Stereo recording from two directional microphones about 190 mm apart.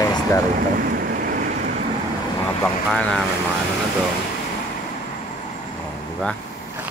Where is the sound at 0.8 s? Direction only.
50° right (ahead or behind).